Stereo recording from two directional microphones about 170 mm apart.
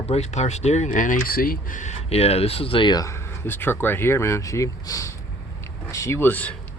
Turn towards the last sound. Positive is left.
turn(degrees=10)  # may be behind; listen again after turning